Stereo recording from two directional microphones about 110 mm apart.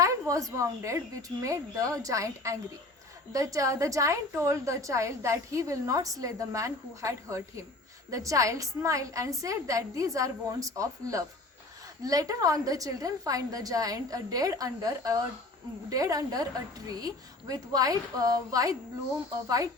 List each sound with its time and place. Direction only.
0.0 s a woman's voice: 30° right (ahead or behind)